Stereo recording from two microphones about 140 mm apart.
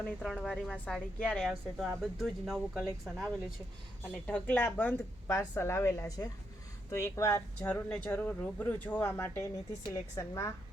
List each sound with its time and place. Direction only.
0.0 s a woman's voice: 10° left (ahead or behind)